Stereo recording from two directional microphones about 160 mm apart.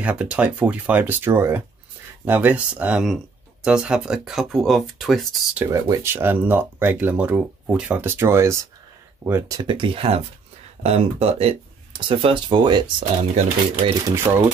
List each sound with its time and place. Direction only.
0.0 s speech: 5° right (ahead or behind)
5.7 s speech: 20° right (ahead or behind)
9.6 s speech: 30° right (ahead or behind)
14.0 s speech: 20° right (ahead or behind)